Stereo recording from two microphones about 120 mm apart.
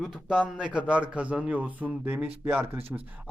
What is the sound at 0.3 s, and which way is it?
Speech, 10° right (ahead or behind).